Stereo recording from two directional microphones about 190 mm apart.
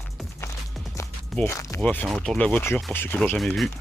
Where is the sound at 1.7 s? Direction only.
10° left (ahead or behind).